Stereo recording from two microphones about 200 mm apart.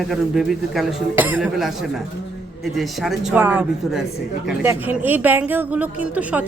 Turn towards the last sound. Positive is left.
turn(degrees=-5)  # may be behind; listen again after turning